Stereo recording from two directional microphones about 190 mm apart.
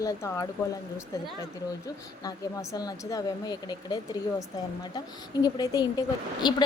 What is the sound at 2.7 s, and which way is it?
A woman's voice, 20° left (ahead or behind).